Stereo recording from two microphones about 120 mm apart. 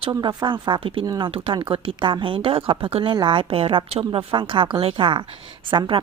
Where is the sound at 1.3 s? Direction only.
50° right (ahead or behind).